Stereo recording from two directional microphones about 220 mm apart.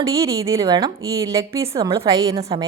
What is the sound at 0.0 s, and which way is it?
A woman's voice, 15° right (ahead or behind).